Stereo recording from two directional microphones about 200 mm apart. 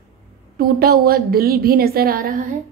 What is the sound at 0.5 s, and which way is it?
A woman's voice, 50° right (ahead or behind).